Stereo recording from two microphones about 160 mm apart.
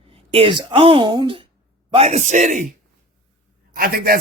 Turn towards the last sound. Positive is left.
turn(degrees=-65)  # may be behind; listen again after turning